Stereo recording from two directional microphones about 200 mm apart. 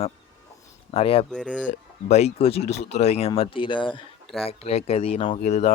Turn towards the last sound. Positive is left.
turn(degrees=35)  # may be behind; listen again after turning